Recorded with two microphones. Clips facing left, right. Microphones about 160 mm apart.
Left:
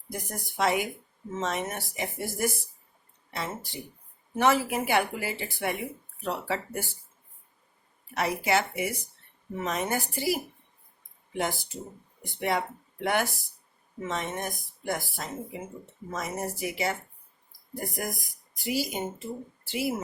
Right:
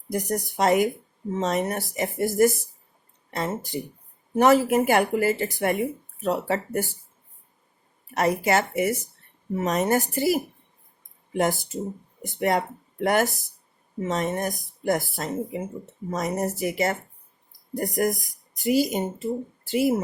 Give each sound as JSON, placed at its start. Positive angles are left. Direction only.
{"t": 0.1, "sound": "speech", "side_deg": -40}
{"t": 8.1, "sound": "speech", "side_deg": -45}